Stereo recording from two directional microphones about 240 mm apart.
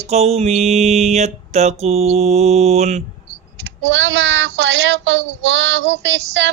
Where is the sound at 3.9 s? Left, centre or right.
Right.